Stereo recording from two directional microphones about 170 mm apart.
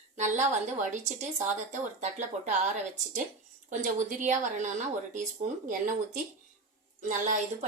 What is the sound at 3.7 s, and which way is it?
Speech, 45° right (ahead or behind).